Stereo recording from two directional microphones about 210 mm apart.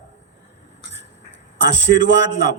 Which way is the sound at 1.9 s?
60° right (ahead or behind).